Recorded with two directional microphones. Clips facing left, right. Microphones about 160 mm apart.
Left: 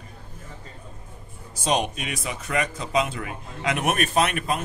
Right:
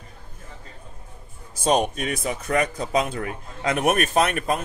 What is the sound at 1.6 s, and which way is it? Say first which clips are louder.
Speech: right 4 dB; 45° right (ahead or behind).